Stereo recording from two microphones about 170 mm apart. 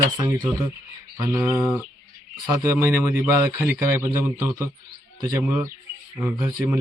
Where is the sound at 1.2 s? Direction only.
15° right (ahead or behind).